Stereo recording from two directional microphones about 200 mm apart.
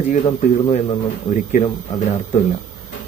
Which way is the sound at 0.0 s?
40° left (ahead or behind).